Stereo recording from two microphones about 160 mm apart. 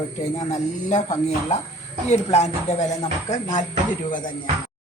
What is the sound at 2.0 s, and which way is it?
Speech, 45° left (ahead or behind).